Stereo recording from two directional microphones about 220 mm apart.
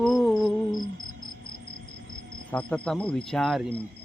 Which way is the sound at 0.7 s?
20° left (ahead or behind).